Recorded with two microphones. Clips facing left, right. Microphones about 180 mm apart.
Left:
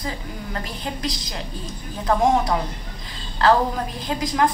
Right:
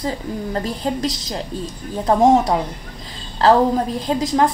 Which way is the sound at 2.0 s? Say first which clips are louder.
Right 5 dB; 30° right (ahead or behind).